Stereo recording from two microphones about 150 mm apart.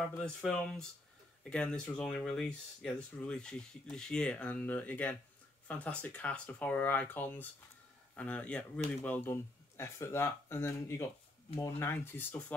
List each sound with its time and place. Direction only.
0.1 s speech: 5° left (ahead or behind)